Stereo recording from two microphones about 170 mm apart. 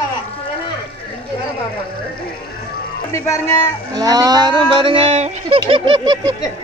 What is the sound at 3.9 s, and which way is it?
Speech, 20° right (ahead or behind).